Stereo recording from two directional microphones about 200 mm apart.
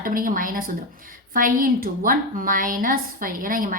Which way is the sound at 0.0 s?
45° right (ahead or behind).